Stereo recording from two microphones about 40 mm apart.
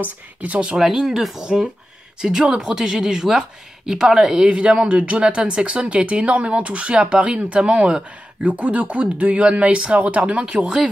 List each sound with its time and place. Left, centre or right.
0.0 s speech: right
0.7 s speech: centre; by 8.0 s right
8.5 s speech: right
10.4 s speech: right